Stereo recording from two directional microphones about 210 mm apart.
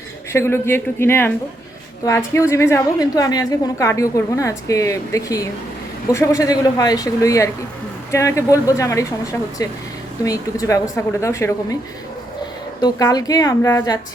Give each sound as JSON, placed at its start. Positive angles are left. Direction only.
{"t": 0.3, "sound": "a woman's voice", "side_deg": 10}
{"t": 12.8, "sound": "a woman's voice", "side_deg": 15}